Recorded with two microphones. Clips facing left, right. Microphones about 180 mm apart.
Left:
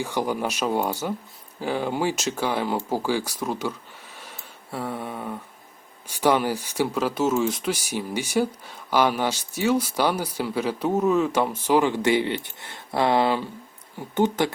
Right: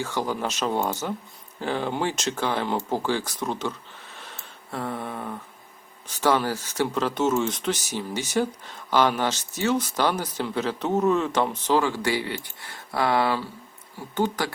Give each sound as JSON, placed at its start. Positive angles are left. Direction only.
{"t": 0.0, "sound": "speech", "side_deg": 15}
{"t": 4.2, "sound": "a sound", "side_deg": 10}
{"t": 6.1, "sound": "speech", "side_deg": 15}